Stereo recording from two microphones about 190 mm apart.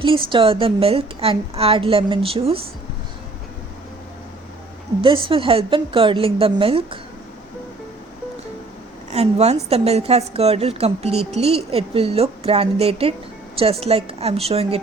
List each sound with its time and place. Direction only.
0.0 s a woman's voice: 25° right (ahead or behind)
5.0 s a woman's voice: 25° right (ahead or behind)
9.1 s a woman's voice: 35° right (ahead or behind)